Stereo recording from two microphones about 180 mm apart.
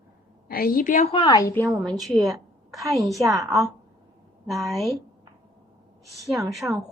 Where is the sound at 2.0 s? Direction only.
Centre (ahead or behind).